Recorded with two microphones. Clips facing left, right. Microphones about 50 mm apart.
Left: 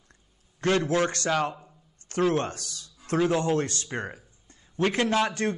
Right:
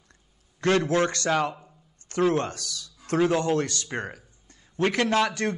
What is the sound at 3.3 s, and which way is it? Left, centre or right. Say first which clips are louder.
A man's voice: right 1 dB; right.